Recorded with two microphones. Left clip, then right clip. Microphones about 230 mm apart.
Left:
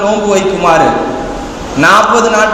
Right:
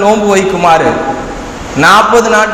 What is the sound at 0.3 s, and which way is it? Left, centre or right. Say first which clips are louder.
Speech: right 2 dB; right.